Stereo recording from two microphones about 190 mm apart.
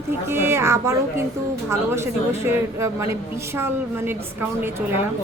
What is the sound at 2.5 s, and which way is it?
Speech, 15° right (ahead or behind).